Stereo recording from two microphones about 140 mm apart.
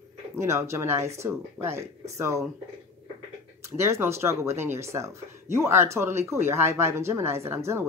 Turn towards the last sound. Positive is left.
turn(degrees=-20)  # may be behind; listen again after turning